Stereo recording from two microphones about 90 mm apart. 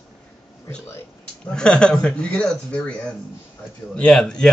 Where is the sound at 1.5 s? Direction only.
10° left (ahead or behind).